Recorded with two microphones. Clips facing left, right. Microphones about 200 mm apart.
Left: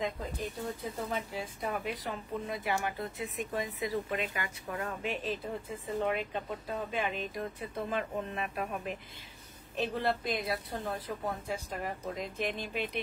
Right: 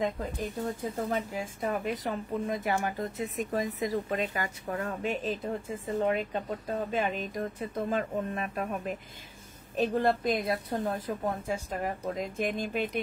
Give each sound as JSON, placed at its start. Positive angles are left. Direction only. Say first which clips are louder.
{"t": 0.7, "sound": "a woman's voice", "louder": "right 5 dB", "side_deg": -45}